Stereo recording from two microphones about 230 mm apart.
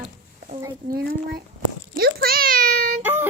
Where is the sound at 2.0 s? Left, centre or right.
Right.